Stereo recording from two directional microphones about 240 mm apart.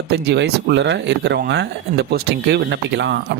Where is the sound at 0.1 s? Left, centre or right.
Right.